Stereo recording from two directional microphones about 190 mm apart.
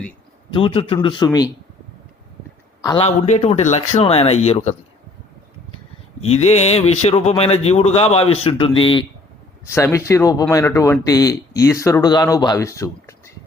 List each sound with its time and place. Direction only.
0.5 s a man's voice: 30° left (ahead or behind)
2.8 s a man's voice: 25° left (ahead or behind)
3.2 s speech: 35° left (ahead or behind)
6.1 s speech: 35° left (ahead or behind)
9.7 s speech: 15° left (ahead or behind)